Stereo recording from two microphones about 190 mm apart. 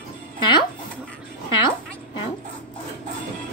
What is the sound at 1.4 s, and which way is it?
Music, 25° left (ahead or behind).